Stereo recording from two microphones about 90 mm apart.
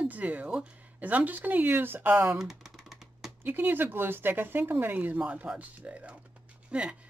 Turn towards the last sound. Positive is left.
turn(degrees=-10)  # may be behind; listen again after turning